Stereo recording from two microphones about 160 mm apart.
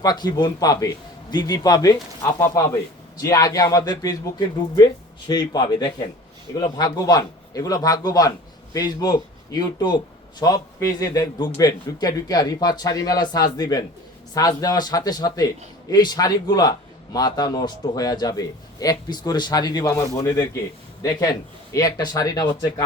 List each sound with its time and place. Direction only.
0.0 s a man's voice: 25° left (ahead or behind)
21.7 s a man's voice: 25° left (ahead or behind)